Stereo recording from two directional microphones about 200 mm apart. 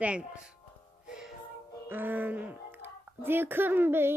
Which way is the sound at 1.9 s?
10° right (ahead or behind).